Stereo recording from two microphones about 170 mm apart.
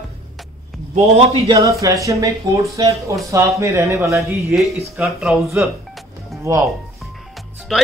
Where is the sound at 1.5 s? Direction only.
20° right (ahead or behind).